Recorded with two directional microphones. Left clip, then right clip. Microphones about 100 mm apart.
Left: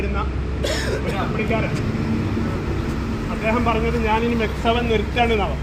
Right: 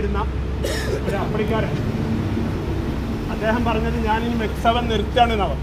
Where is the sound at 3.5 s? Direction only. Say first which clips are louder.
Left 2 dB; 40° right (ahead or behind).